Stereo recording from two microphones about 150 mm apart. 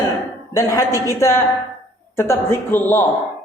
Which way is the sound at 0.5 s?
20° left (ahead or behind).